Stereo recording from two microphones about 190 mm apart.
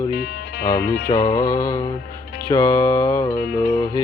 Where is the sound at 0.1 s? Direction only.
55° left (ahead or behind).